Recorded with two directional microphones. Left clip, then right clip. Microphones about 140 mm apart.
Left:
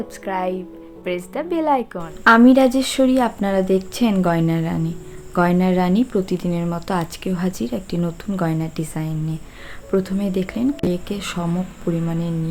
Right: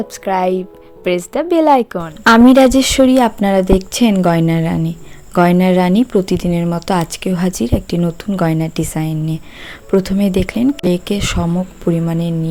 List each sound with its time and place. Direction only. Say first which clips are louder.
0.3 s speech: right 8 dB; 50° right (ahead or behind)